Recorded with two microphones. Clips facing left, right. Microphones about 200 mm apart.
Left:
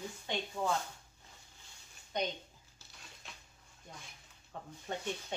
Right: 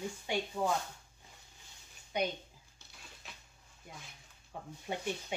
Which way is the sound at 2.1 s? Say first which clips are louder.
Right 2 dB; 10° right (ahead or behind).